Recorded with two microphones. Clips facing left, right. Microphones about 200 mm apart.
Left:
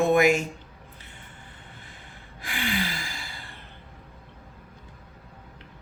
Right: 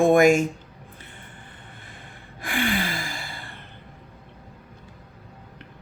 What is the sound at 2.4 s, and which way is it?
Gasp, 55° right (ahead or behind).